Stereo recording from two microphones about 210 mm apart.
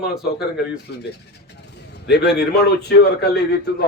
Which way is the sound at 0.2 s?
Centre (ahead or behind).